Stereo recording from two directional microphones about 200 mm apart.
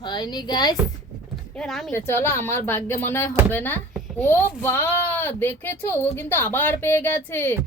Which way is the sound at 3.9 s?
5° left (ahead or behind).